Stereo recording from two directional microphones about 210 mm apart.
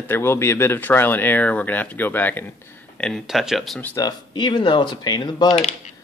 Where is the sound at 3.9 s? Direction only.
20° left (ahead or behind).